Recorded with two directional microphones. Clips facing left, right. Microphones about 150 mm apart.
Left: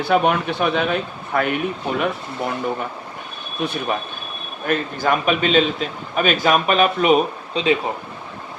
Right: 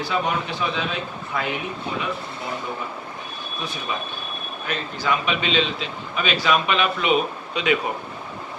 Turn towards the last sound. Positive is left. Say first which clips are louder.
# left 3 dB
turn(degrees=30)  # may be behind; listen again after turning